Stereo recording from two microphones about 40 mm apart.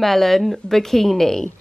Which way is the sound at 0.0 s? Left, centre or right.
Centre.